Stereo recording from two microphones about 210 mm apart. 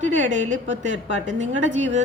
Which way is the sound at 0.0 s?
35° right (ahead or behind).